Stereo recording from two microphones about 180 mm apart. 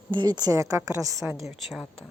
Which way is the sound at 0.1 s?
25° right (ahead or behind).